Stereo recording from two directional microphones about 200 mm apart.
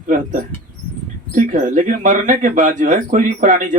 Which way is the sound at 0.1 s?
40° right (ahead or behind).